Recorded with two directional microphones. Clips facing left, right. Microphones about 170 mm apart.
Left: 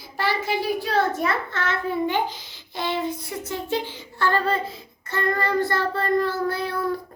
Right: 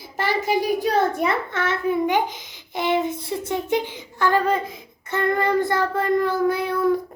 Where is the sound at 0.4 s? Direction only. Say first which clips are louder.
Right 4 dB; 15° right (ahead or behind).